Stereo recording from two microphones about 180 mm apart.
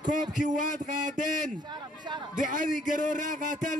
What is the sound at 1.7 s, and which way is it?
Speech, 25° right (ahead or behind).